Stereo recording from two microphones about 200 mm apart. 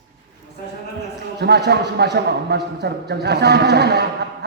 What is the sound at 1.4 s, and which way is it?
A man's voice, 55° right (ahead or behind).